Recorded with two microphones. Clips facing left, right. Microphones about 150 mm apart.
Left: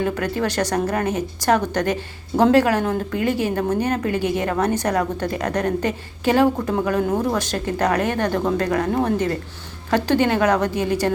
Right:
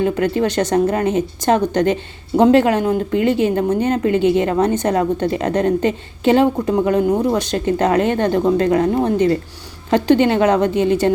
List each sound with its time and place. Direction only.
0.0 s speech: 20° right (ahead or behind)